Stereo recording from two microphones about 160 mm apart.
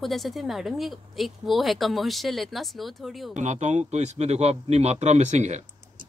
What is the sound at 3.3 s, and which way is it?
Speech, 50° right (ahead or behind).